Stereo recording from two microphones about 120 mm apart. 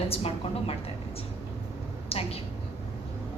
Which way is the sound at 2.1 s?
55° left (ahead or behind).